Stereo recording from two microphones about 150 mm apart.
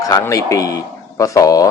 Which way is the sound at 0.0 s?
20° left (ahead or behind).